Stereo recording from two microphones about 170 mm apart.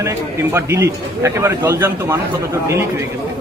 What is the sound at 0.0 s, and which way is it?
A man's voice, 15° right (ahead or behind).